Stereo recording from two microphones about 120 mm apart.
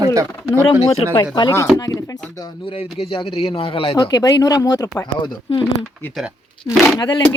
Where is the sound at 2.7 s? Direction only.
50° left (ahead or behind).